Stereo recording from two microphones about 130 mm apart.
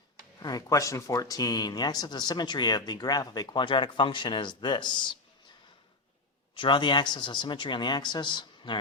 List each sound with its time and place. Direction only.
0.3 s speech: 30° left (ahead or behind)
6.6 s speech: 35° left (ahead or behind)